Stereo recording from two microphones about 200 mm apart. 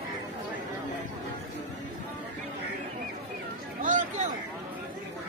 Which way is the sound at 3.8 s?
40° right (ahead or behind).